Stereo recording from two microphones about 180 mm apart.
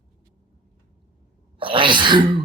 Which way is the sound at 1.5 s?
30° right (ahead or behind).